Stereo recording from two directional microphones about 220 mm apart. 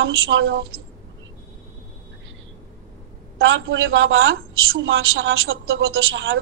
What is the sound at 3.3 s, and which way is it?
A woman's voice, 60° right (ahead or behind).